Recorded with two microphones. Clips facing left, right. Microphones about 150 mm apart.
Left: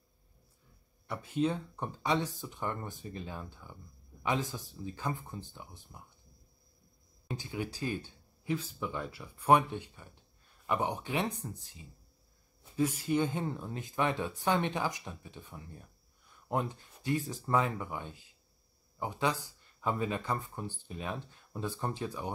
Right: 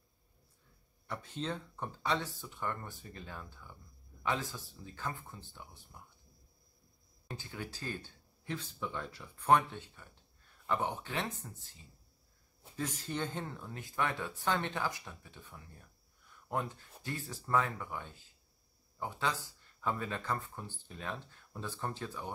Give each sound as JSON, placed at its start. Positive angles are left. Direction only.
{"t": 1.0, "sound": "speech", "side_deg": 10}
{"t": 7.2, "sound": "speech", "side_deg": 15}